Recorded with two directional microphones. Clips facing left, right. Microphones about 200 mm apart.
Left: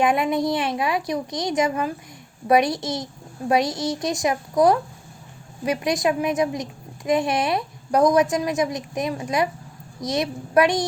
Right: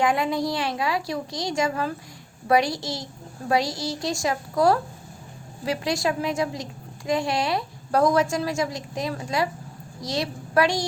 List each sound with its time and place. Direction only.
0.0 s a woman's voice: 20° left (ahead or behind)